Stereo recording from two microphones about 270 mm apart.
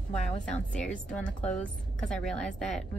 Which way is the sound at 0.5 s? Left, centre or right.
Centre.